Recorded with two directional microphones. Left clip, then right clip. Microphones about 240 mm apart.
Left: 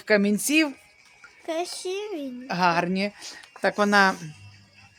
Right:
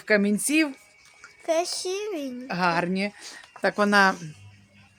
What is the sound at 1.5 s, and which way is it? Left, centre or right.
Speech, centre.